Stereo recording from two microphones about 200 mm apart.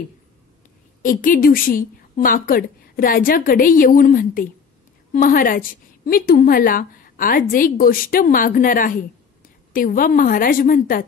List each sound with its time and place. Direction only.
1.0 s a woman's voice: 40° left (ahead or behind)